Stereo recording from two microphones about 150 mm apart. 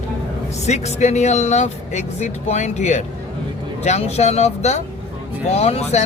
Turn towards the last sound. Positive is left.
turn(degrees=45)  # may be behind; listen again after turning